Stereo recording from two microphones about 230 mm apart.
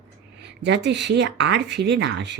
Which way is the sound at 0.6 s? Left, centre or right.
Right.